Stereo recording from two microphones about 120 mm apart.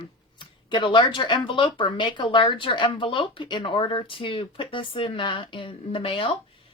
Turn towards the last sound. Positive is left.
turn(degrees=50)  # may be behind; listen again after turning